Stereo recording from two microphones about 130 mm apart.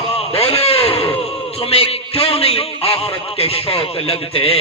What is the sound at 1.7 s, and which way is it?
A man's voice, 50° left (ahead or behind).